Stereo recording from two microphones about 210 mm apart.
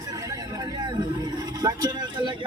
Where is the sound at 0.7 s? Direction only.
20° right (ahead or behind).